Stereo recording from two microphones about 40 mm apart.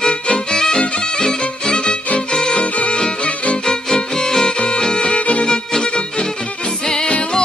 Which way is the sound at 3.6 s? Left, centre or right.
Centre.